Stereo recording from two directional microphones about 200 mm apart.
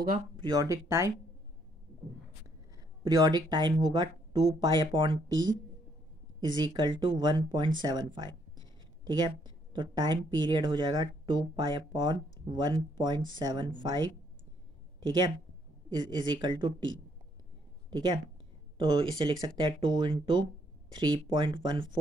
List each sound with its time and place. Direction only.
0.4 s speech: 20° right (ahead or behind)
3.0 s speech: 20° right (ahead or behind)
6.4 s speech: 20° right (ahead or behind)